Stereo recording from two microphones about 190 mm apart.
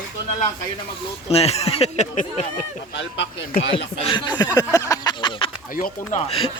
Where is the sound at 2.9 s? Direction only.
70° left (ahead or behind).